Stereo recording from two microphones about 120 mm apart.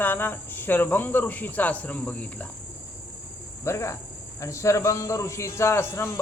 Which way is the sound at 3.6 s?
25° left (ahead or behind).